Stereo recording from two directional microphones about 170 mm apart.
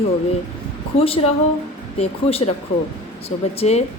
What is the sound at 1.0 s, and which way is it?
Speech, 35° left (ahead or behind).